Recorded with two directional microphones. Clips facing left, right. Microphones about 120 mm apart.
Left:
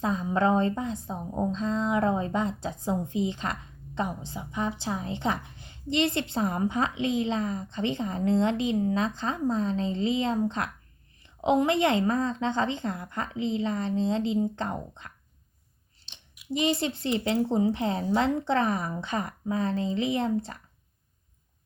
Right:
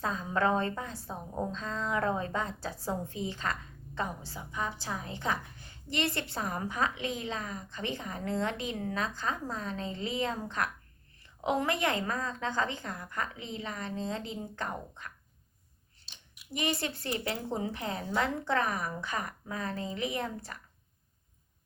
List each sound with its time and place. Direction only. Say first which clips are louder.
0.0 s a woman's voice: left 5 dB; 20° left (ahead or behind)
16.5 s a woman's voice: left 7 dB; 25° left (ahead or behind)